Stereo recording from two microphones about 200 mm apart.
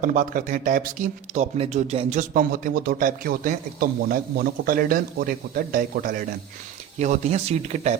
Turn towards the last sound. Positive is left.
turn(degrees=-35)  # may be behind; listen again after turning